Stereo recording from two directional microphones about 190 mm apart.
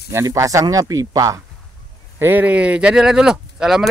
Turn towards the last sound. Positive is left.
turn(degrees=-5)  # may be behind; listen again after turning